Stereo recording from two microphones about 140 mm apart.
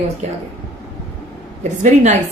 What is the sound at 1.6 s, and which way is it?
Speech, 55° right (ahead or behind).